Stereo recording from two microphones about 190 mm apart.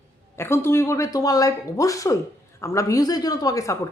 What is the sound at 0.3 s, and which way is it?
A woman's voice, 15° left (ahead or behind).